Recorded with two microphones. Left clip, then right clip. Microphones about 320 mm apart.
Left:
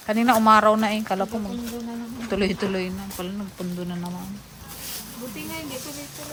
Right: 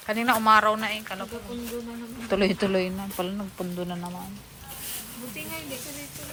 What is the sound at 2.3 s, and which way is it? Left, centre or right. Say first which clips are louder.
Speech: right 1 dB; centre.